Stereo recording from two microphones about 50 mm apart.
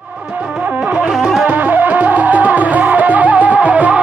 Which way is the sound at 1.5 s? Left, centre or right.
Right.